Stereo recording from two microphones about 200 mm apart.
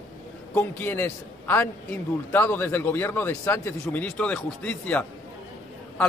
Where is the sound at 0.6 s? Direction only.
10° left (ahead or behind).